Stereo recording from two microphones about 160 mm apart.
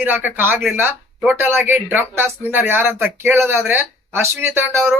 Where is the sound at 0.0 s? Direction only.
10° right (ahead or behind).